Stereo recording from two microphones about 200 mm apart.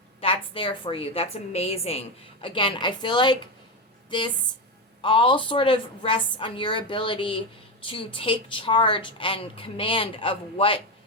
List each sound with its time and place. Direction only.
0.2 s a woman's voice: 25° left (ahead or behind)
5.0 s a woman's voice: 25° left (ahead or behind)